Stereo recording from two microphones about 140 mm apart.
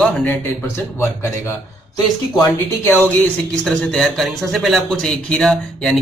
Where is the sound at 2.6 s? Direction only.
15° left (ahead or behind).